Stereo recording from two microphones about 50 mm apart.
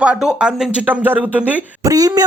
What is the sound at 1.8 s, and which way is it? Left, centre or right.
Speech, right.